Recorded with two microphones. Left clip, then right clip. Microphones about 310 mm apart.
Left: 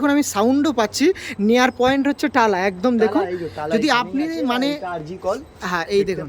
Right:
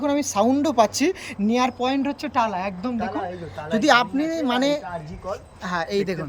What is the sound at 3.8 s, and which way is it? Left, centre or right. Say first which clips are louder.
Speech: right 3 dB; centre.